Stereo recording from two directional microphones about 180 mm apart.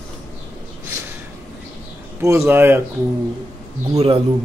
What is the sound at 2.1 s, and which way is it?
Speech, 15° right (ahead or behind).